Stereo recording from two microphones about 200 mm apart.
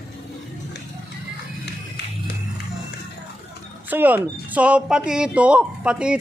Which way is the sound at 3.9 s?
10° right (ahead or behind).